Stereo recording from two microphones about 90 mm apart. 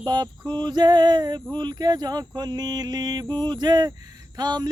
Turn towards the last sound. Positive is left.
turn(degrees=-50)  # may be behind; listen again after turning